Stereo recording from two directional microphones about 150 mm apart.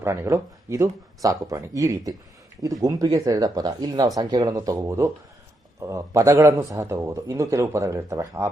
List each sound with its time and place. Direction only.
0.0 s a man's voice: 15° right (ahead or behind)